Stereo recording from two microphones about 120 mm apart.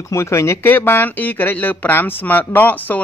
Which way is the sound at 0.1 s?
25° left (ahead or behind).